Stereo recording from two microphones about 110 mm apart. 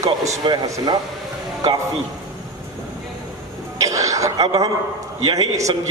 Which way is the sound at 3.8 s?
30° right (ahead or behind).